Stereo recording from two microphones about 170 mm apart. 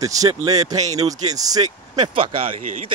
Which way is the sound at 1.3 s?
20° right (ahead or behind).